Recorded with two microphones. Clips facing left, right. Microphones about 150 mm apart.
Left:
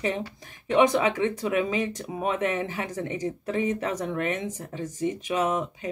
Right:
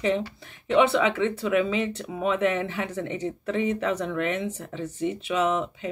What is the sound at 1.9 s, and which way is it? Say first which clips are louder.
Speech: right 2 dB; 35° left (ahead or behind).